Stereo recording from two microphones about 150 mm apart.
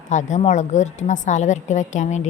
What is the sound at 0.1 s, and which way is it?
A woman's voice, 55° left (ahead or behind).